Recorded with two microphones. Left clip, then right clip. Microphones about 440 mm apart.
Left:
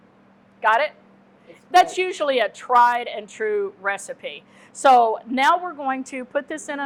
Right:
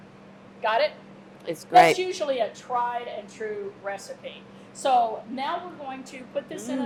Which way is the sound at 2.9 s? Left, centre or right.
Left.